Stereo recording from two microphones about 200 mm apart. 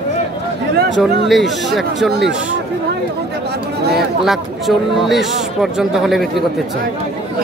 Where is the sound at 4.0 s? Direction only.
Centre (ahead or behind).